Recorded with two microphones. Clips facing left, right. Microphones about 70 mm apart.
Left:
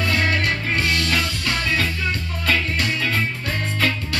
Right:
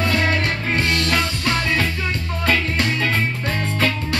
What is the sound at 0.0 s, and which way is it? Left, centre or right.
Music, right.